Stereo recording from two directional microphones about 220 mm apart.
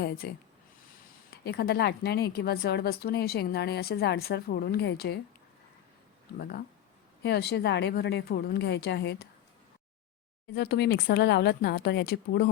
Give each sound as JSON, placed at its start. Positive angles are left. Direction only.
{"t": 0.2, "sound": "a woman's voice", "side_deg": 45}
{"t": 7.2, "sound": "a woman's voice", "side_deg": 50}
{"t": 10.5, "sound": "a woman's voice", "side_deg": 45}